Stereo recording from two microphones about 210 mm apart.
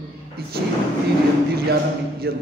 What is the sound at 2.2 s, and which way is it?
Speech, 50° right (ahead or behind).